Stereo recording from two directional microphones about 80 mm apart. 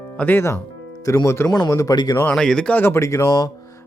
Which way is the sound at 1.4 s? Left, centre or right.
Left.